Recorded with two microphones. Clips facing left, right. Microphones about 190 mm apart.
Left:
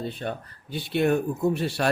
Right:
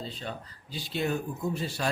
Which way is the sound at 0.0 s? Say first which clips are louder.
Left 7 dB; 60° left (ahead or behind).